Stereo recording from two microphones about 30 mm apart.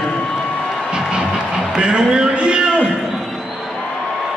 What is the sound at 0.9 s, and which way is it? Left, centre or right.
Music, right.